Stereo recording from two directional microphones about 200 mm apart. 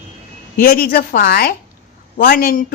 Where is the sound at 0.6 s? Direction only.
45° left (ahead or behind).